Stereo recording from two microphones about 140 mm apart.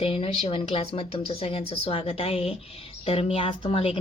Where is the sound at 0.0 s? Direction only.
45° left (ahead or behind).